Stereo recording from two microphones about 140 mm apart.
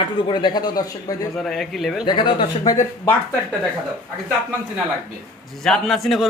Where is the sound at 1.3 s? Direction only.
Centre (ahead or behind).